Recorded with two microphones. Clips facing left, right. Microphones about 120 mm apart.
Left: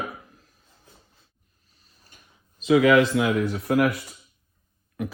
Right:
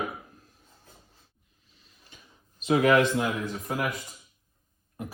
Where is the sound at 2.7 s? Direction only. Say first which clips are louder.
Left 4 dB; 90° left; by 3.9 s 70° left (ahead or behind).